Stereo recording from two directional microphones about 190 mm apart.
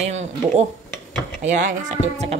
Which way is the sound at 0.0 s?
35° right (ahead or behind).